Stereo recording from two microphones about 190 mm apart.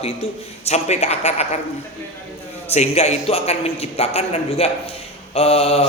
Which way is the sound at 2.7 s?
35° left (ahead or behind).